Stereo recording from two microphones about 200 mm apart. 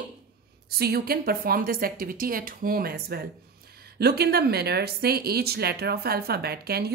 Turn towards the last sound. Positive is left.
turn(degrees=-50)  # may be behind; listen again after turning